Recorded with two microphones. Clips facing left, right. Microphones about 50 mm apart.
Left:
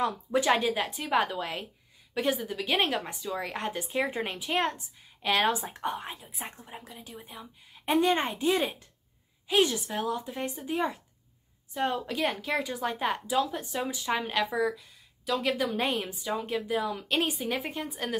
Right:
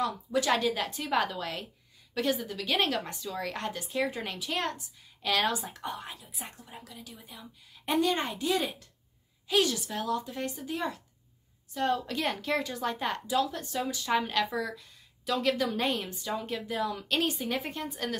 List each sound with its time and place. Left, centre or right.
0.0 s a woman's voice: left
12.2 s a woman's voice: centre